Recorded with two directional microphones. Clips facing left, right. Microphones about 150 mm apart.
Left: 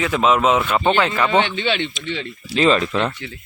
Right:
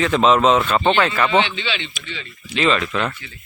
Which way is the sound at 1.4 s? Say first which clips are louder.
Left 2 dB; 50° left (ahead or behind).